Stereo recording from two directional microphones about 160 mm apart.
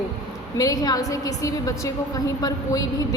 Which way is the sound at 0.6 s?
25° left (ahead or behind).